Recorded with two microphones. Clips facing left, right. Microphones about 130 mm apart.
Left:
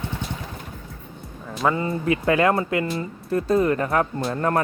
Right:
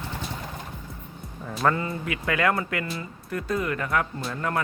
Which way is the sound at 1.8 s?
25° left (ahead or behind).